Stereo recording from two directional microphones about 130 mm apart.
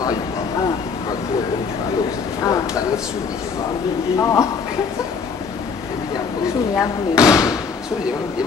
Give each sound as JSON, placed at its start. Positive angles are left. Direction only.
{"t": 2.4, "sound": "a sound", "side_deg": 30}
{"t": 4.2, "sound": "speech", "side_deg": 25}
{"t": 6.8, "sound": "speech", "side_deg": 25}